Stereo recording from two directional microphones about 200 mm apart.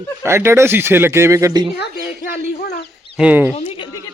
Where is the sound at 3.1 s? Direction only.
5° right (ahead or behind).